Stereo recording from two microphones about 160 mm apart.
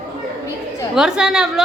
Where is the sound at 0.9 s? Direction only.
5° right (ahead or behind).